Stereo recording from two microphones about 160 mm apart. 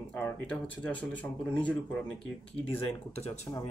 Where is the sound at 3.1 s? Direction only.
40° left (ahead or behind).